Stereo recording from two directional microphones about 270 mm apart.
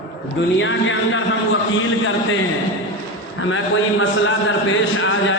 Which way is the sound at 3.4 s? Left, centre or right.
Left.